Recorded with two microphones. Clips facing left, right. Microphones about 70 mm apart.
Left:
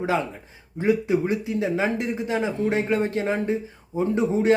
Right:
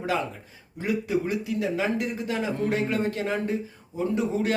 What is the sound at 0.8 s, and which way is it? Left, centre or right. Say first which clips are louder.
Speech: left 5 dB; left.